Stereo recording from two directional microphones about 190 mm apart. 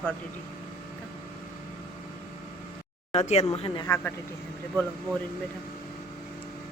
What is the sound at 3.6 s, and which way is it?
Speech, 25° left (ahead or behind).